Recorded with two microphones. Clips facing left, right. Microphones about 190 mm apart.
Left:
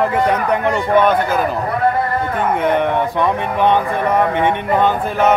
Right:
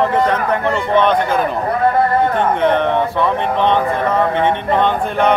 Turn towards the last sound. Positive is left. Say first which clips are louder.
# even
turn(degrees=5)  # may be behind; listen again after turning